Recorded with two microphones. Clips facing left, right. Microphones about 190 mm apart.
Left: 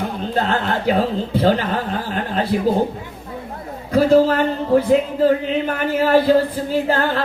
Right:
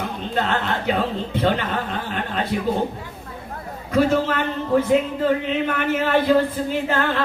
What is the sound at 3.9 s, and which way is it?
A man's voice, 35° left (ahead or behind).